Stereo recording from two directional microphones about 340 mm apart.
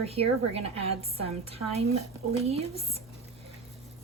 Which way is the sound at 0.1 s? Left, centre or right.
Centre.